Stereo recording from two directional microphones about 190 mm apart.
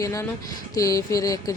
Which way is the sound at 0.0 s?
15° left (ahead or behind).